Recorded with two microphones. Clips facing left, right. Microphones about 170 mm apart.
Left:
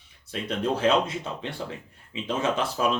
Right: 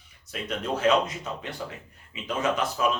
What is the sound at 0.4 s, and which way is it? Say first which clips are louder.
Speech: left 1 dB; 30° left (ahead or behind).